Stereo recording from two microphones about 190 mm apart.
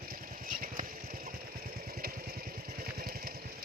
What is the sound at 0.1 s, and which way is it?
Vehicle, 50° right (ahead or behind).